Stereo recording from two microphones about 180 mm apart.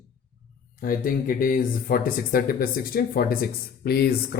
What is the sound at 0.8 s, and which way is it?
Speech, 50° left (ahead or behind).